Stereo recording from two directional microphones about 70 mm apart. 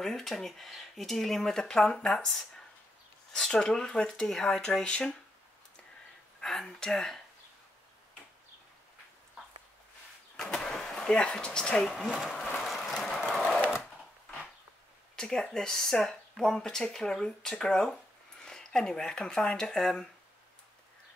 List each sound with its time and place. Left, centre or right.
0.0 s speech: centre
6.4 s speech: centre
10.3 s speech: centre
12.1 s speech: centre
12.5 s train: centre
13.6 s sewing machine: left
15.1 s speech: centre